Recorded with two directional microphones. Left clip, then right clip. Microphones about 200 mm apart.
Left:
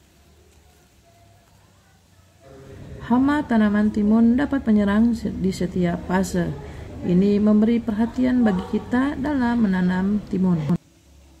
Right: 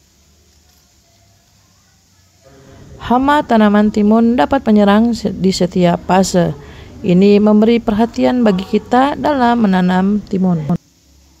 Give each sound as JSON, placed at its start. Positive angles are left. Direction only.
{"t": 3.0, "sound": "a woman's voice", "side_deg": -45}